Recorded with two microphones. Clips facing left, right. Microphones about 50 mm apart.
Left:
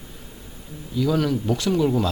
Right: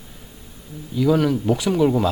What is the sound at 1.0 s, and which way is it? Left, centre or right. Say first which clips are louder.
Speech: right 3 dB; centre.